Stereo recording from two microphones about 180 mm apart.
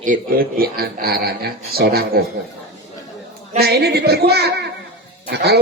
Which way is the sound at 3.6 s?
60° right (ahead or behind).